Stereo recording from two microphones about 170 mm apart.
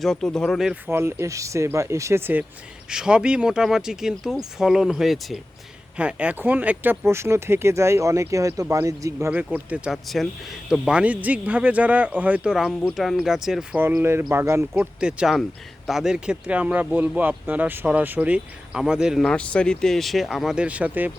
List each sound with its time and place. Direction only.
0.0 s speech: 5° left (ahead or behind)
0.9 s speech: 15° right (ahead or behind)
14.0 s speech: 15° right (ahead or behind)
15.0 s speech: 5° right (ahead or behind)